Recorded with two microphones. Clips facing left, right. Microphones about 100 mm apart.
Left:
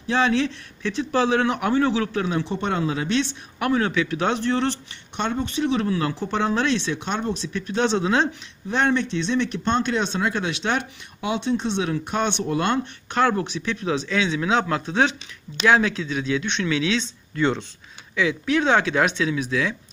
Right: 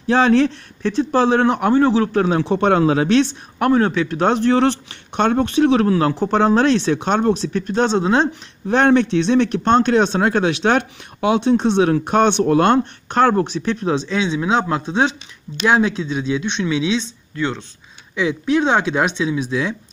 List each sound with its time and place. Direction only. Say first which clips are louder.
0.0 s speech: right 7 dB; 50° right (ahead or behind)
2.4 s speech: right 9 dB; 60° right (ahead or behind)
3.5 s speech: right 6 dB; 40° right (ahead or behind)
8.6 s speech: right 7 dB; 55° right (ahead or behind)
13.1 s speech: right 6 dB; 35° right (ahead or behind); by 17.0 s 20° right (ahead or behind)
17.4 s speech: left 1 dB; centre (ahead or behind)
18.1 s speech: right 4 dB; 25° right (ahead or behind)